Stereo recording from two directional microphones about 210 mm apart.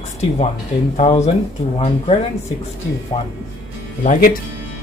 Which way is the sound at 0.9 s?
30° left (ahead or behind).